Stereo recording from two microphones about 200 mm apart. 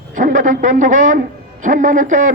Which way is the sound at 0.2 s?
40° right (ahead or behind).